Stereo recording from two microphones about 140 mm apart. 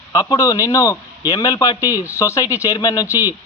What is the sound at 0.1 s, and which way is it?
A man's voice, 25° left (ahead or behind).